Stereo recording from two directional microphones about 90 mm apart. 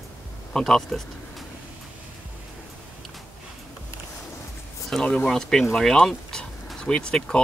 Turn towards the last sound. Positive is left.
turn(degrees=10)  # may be behind; listen again after turning